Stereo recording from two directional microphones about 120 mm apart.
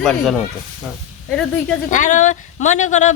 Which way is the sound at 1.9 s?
90° left.